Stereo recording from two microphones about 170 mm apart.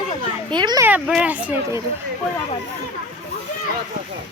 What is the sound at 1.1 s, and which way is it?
Speech, 5° right (ahead or behind).